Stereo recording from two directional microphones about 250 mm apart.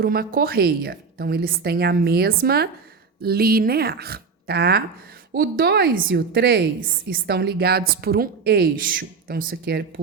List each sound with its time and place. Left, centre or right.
0.0 s a woman's voice: right